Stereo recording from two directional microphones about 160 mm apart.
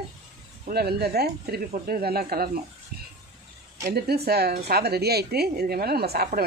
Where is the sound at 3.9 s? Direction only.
85° right.